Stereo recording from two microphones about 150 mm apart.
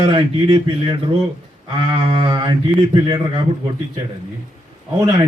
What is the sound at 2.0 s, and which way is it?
Speech, 35° right (ahead or behind).